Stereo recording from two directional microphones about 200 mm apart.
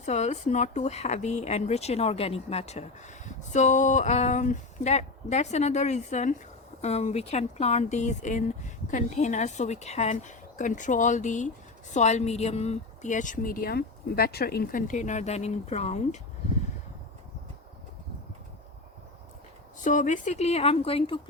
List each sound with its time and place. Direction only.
0.0 s a woman's voice: 35° left (ahead or behind)
19.8 s a woman's voice: 40° left (ahead or behind)